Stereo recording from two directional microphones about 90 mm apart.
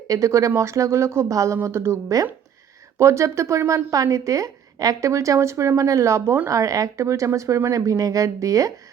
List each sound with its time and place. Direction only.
0.1 s a woman's voice: 35° right (ahead or behind)
6.5 s a woman's voice: 40° right (ahead or behind)